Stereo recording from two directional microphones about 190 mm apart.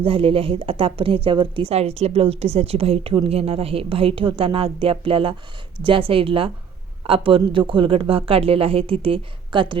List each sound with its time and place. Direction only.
0.0 s a woman's voice: 30° right (ahead or behind)